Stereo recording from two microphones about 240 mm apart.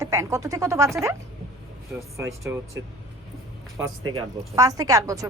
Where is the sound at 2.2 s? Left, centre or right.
Centre.